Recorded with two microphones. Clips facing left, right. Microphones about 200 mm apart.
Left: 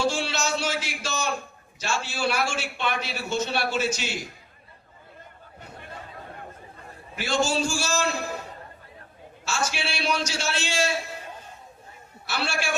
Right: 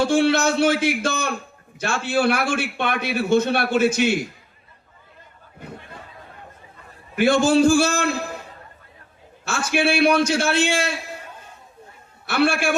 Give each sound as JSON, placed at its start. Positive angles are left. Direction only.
{"t": 0.0, "sound": "a man's voice", "side_deg": -55}
{"t": 7.2, "sound": "a man's voice", "side_deg": -55}
{"t": 12.2, "sound": "a man's voice", "side_deg": -55}